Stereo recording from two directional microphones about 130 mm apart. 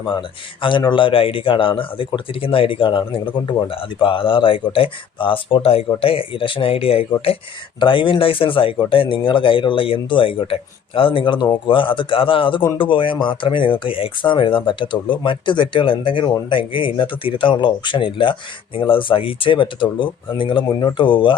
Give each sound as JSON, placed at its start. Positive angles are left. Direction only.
{"t": 0.0, "sound": "speech", "side_deg": 40}